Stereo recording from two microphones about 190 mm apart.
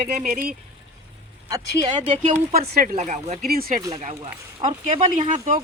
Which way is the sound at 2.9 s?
35° right (ahead or behind).